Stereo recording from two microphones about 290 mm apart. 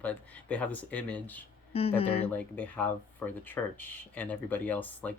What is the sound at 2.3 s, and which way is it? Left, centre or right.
Speech, centre.